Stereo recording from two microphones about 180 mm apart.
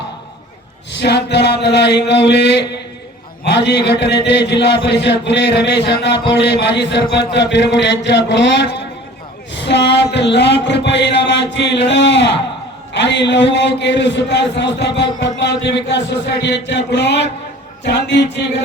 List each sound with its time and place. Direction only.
0.9 s a man's voice: 70° left (ahead or behind)